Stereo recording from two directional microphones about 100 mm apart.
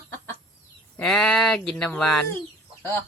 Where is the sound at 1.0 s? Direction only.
10° left (ahead or behind).